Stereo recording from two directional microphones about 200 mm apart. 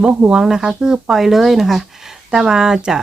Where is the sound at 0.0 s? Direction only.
5° right (ahead or behind).